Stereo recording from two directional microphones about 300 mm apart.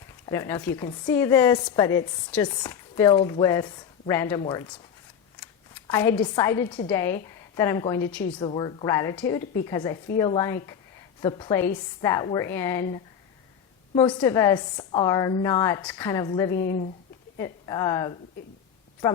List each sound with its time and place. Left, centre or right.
0.3 s a woman's voice: centre
16.6 s speech: left
17.3 s a woman's voice: centre